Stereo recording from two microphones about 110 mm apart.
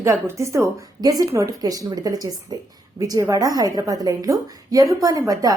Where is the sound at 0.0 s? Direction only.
25° right (ahead or behind).